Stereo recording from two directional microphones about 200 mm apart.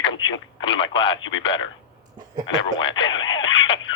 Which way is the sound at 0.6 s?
25° left (ahead or behind).